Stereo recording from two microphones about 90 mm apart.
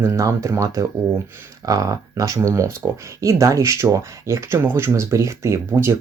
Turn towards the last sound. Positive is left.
turn(degrees=-30)  # may be behind; listen again after turning